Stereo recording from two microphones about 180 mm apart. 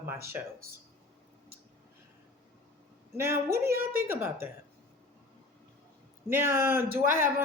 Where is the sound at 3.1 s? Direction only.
15° right (ahead or behind).